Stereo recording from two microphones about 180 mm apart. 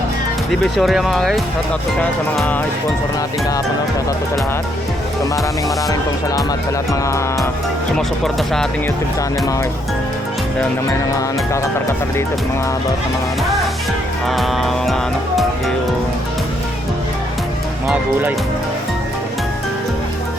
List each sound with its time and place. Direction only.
0.6 s speech: centre (ahead or behind)
5.6 s speech: 20° left (ahead or behind)
6.9 s music: 15° left (ahead or behind)
7.9 s speech: 5° left (ahead or behind)
14.3 s music: centre (ahead or behind)
17.8 s speech: 10° right (ahead or behind)